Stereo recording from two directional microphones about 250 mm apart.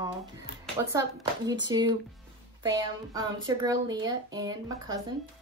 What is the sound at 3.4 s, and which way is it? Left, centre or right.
Speech, centre.